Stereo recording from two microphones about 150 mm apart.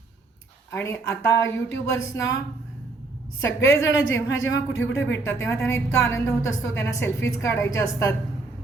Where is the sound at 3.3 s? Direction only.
20° left (ahead or behind).